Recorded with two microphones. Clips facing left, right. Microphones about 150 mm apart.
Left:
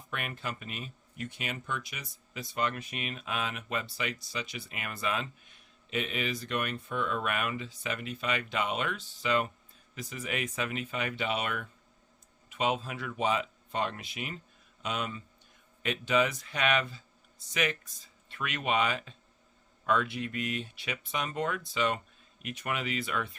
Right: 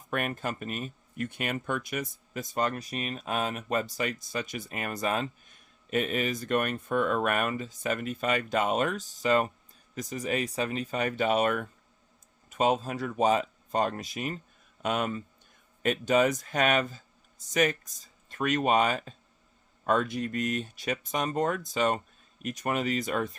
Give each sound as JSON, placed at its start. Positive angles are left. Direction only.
{"t": 0.1, "sound": "a man's voice", "side_deg": -45}